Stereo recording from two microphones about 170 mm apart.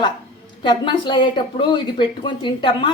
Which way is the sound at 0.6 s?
25° left (ahead or behind).